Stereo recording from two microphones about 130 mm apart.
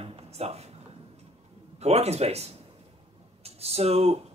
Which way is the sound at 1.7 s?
55° right (ahead or behind).